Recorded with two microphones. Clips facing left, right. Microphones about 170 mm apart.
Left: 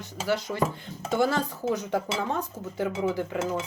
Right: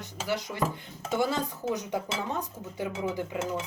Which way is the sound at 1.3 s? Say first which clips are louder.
Left 3 dB; 15° right (ahead or behind).